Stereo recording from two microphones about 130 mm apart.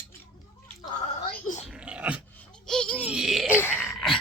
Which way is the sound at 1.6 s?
10° right (ahead or behind).